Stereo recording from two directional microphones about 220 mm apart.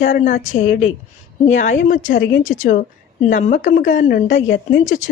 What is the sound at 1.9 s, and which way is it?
Speech, 40° left (ahead or behind).